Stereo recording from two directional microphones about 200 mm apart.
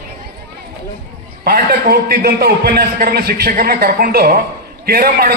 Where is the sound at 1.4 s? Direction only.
50° right (ahead or behind).